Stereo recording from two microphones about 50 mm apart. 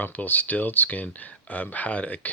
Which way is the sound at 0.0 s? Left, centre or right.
Left.